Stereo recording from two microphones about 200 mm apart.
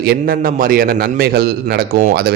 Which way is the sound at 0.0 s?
50° right (ahead or behind).